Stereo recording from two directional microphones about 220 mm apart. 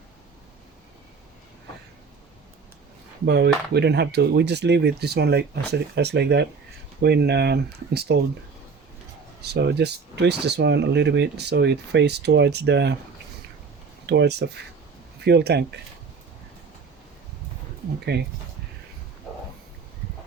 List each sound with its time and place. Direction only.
3.2 s speech: 50° right (ahead or behind)
9.4 s speech: 50° right (ahead or behind)
14.1 s speech: 50° right (ahead or behind)
18.1 s speech: 50° right (ahead or behind)